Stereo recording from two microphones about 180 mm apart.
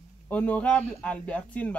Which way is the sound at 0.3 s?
5° left (ahead or behind).